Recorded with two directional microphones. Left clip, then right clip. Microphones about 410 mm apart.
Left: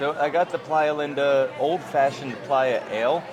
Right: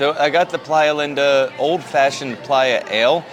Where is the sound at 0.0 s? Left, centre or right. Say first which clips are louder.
Right 7 dB; right.